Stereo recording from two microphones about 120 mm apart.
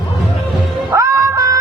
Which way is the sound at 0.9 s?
25° right (ahead or behind).